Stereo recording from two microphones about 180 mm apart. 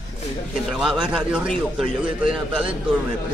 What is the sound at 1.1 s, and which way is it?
A man's voice, 5° right (ahead or behind).